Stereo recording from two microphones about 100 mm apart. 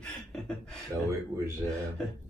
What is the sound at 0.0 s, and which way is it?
Beatboxing, 5° left (ahead or behind).